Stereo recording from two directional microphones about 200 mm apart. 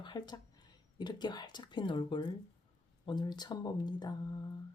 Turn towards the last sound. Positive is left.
turn(degrees=20)  # may be behind; listen again after turning